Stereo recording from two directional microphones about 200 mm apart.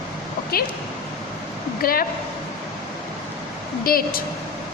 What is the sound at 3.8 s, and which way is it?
Speech, 45° left (ahead or behind).